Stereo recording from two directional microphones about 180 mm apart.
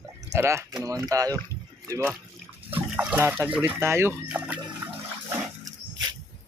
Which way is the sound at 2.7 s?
10° right (ahead or behind).